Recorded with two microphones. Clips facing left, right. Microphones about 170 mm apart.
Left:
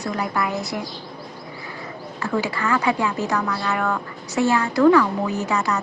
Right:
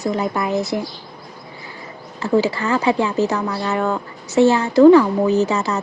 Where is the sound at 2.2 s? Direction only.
25° right (ahead or behind).